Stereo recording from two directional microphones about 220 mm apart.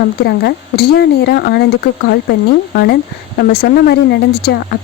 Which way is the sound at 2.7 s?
45° left (ahead or behind).